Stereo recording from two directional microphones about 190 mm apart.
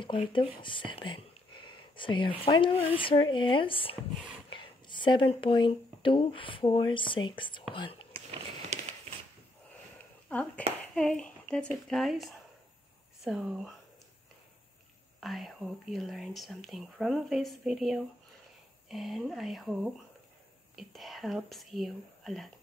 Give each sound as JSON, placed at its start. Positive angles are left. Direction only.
{"t": 0.0, "sound": "speech", "side_deg": 25}
{"t": 8.1, "sound": "a sound", "side_deg": -30}
{"t": 10.3, "sound": "speech", "side_deg": 5}
{"t": 15.1, "sound": "speech", "side_deg": 0}